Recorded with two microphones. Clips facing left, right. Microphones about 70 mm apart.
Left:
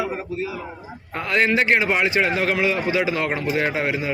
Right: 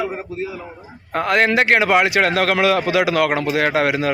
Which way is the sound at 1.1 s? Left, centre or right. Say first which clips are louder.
Right 4 dB; right.